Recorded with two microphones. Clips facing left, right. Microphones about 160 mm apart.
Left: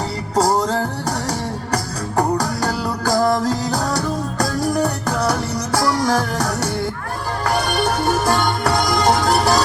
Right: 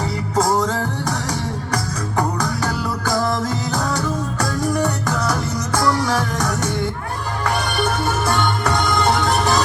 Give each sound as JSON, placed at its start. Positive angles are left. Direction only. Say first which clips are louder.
{"t": 0.3, "sound": "music", "louder": "left 2 dB", "side_deg": 35}